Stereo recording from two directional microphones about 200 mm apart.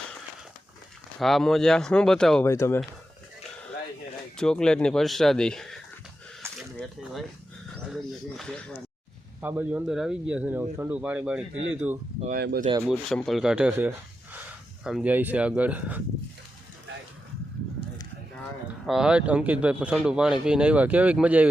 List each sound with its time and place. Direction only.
1.2 s speech: centre (ahead or behind)
4.4 s speech: 5° left (ahead or behind)
9.4 s a man's voice: 10° right (ahead or behind)
12.2 s speech: 50° right (ahead or behind)
12.9 s a man's voice: centre (ahead or behind)
18.9 s speech: 5° right (ahead or behind)